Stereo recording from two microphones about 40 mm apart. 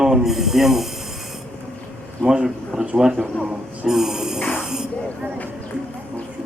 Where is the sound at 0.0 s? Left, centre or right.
Centre.